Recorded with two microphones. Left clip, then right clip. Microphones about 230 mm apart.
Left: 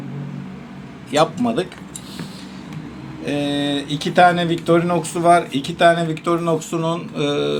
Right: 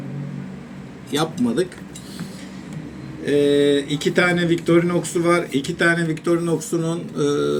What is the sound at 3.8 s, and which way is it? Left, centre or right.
Speech, left.